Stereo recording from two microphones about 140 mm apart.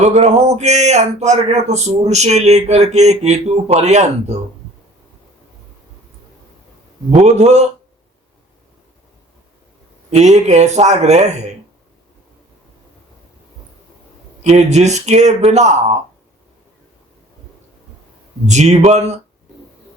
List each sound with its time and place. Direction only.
0.0 s speech: 55° right (ahead or behind)
7.2 s speech: 55° right (ahead or behind)
10.1 s speech: 55° right (ahead or behind)
14.4 s speech: 50° right (ahead or behind)
18.4 s speech: 55° right (ahead or behind)